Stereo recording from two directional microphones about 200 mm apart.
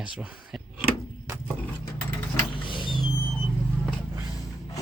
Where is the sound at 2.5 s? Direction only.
25° left (ahead or behind).